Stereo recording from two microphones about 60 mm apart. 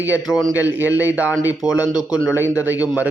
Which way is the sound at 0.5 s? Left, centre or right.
Right.